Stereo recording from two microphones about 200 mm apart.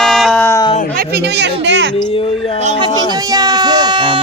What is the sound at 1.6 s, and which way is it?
Speech, 60° right (ahead or behind).